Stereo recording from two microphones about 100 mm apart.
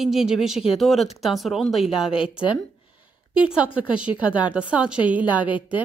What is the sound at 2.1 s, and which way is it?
Speech, 60° left (ahead or behind).